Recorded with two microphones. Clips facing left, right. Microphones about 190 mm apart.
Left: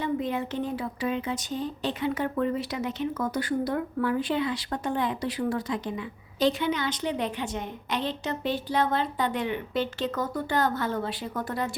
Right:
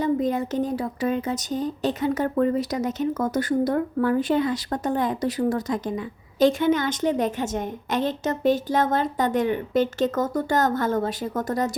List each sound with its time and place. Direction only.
0.0 s speech: 40° right (ahead or behind)